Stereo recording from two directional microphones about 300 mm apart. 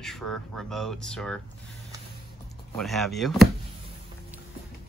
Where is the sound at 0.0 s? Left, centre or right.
Centre.